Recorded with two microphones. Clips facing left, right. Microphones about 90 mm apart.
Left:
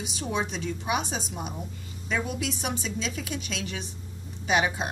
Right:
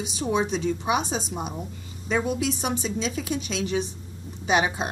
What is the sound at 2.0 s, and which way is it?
A woman's voice, 25° right (ahead or behind).